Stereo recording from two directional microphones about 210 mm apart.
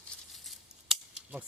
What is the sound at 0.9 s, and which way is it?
Scissors, 5° right (ahead or behind).